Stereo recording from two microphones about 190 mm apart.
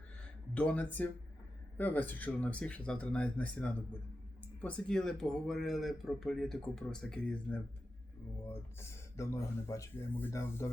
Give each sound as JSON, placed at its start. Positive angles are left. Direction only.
{"t": 0.5, "sound": "speech", "side_deg": 5}
{"t": 8.8, "sound": "speech", "side_deg": 15}